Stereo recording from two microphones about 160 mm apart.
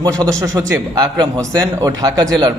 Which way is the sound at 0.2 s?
20° right (ahead or behind).